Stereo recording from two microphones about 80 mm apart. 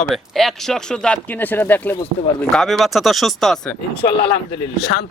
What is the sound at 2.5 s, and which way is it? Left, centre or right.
Speech, centre.